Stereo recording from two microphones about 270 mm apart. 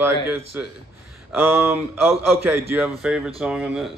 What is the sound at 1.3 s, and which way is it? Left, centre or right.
Speech, centre.